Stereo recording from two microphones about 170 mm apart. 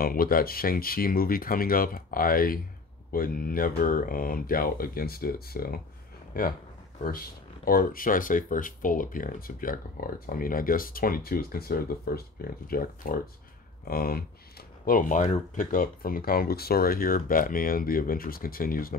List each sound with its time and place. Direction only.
0.0 s speech: 60° left (ahead or behind)